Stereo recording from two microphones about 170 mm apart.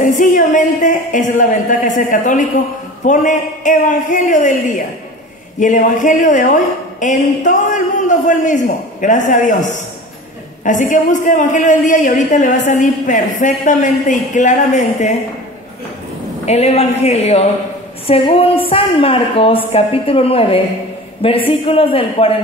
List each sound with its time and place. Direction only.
0.0 s a man's voice: 50° left (ahead or behind)
16.4 s a woman's voice: 40° left (ahead or behind)